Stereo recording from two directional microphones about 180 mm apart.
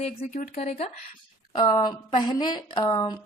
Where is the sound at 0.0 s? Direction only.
40° left (ahead or behind).